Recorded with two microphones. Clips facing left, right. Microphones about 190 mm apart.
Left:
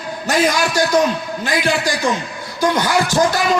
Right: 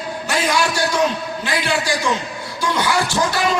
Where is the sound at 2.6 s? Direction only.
45° left (ahead or behind).